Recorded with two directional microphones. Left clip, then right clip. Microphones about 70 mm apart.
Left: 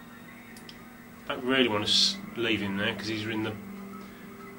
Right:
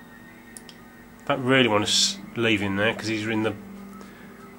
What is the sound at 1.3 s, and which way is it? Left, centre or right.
A man's voice, right.